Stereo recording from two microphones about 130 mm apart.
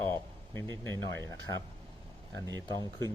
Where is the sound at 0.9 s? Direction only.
20° left (ahead or behind).